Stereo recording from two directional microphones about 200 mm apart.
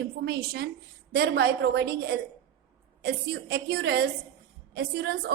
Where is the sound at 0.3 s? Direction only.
55° right (ahead or behind).